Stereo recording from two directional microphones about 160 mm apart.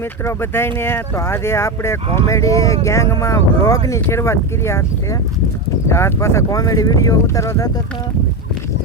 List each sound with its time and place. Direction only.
0.3 s speech: 15° left (ahead or behind)
5.9 s speech: 15° left (ahead or behind)